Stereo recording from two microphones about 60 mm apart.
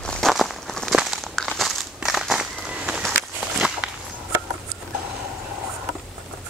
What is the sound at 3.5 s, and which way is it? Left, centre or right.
Walk, centre.